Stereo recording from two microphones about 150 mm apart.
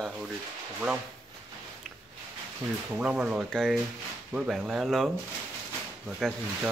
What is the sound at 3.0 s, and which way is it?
Speech, 10° right (ahead or behind).